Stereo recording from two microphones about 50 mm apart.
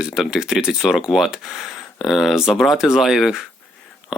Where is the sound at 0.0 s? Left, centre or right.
Centre.